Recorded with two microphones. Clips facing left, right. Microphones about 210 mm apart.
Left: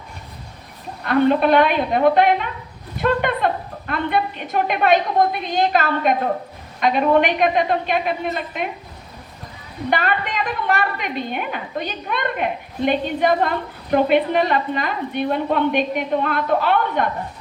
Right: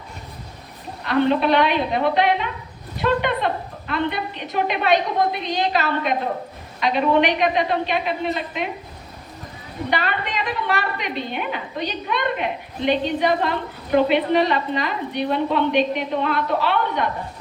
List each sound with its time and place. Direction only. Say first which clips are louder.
1.0 s a woman's voice: left 2 dB; 50° left (ahead or behind)
9.9 s a woman's voice: left 3 dB; 50° left (ahead or behind)